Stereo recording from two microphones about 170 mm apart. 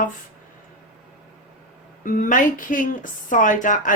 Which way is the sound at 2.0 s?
50° left (ahead or behind).